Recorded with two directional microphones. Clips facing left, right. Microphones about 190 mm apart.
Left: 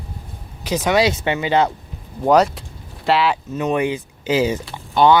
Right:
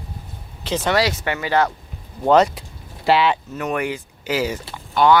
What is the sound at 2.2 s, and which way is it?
Speech, 5° left (ahead or behind).